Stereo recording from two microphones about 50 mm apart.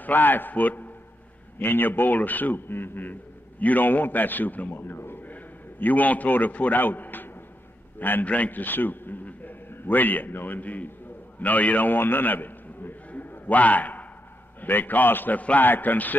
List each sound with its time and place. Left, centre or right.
0.0 s a man's voice: left
5.2 s a man's voice: left